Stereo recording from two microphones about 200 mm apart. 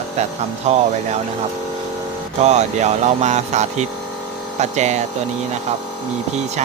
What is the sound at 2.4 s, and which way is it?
Speech, 35° right (ahead or behind).